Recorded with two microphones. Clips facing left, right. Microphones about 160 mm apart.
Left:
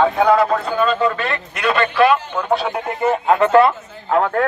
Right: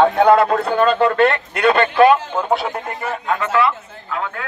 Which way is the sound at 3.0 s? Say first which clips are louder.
Left 8 dB; 20° left (ahead or behind).